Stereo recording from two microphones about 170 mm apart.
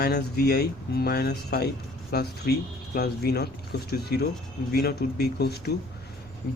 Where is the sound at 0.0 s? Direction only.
70° left (ahead or behind).